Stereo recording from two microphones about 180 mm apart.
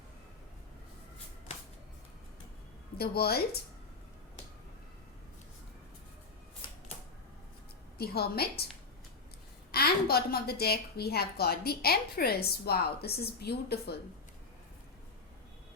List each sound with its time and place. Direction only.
3.0 s a woman's voice: 60° left (ahead or behind)
7.9 s a woman's voice: 60° left (ahead or behind)
9.7 s a woman's voice: 60° left (ahead or behind)